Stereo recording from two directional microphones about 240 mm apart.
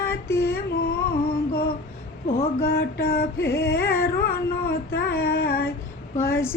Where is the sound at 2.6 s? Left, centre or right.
Left.